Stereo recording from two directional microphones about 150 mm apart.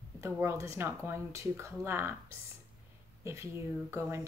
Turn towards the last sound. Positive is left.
turn(degrees=-20)  # may be behind; listen again after turning